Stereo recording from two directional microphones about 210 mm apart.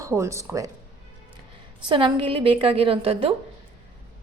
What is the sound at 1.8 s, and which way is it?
A woman's voice, 25° right (ahead or behind).